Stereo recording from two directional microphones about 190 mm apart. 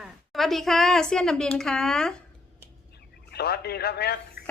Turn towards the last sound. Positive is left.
turn(degrees=55)  # may be behind; listen again after turning